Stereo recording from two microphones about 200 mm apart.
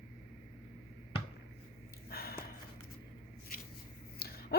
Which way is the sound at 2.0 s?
50° left (ahead or behind).